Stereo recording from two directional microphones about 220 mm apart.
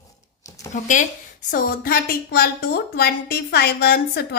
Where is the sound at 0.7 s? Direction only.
35° left (ahead or behind).